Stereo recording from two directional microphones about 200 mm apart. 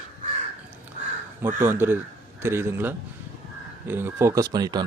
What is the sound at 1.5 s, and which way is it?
A man's voice, 10° right (ahead or behind).